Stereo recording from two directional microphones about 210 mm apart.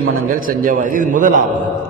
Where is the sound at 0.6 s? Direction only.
40° right (ahead or behind).